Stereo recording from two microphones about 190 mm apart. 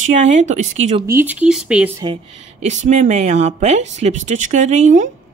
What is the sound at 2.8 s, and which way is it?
Speech, 40° right (ahead or behind).